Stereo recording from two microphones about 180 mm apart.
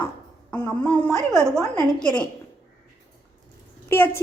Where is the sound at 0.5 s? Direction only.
10° left (ahead or behind).